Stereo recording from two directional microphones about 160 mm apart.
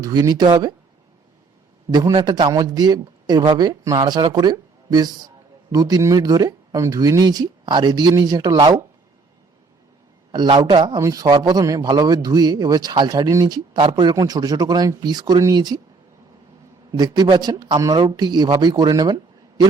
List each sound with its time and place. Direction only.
0.0 s a man's voice: 25° right (ahead or behind)
1.9 s a man's voice: 25° right (ahead or behind)
10.3 s a man's voice: 25° right (ahead or behind)
16.9 s a man's voice: 25° right (ahead or behind)